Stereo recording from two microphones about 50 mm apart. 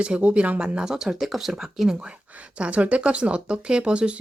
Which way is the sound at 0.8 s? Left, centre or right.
Centre.